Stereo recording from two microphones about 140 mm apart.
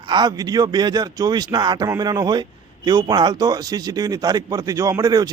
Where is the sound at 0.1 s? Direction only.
30° right (ahead or behind).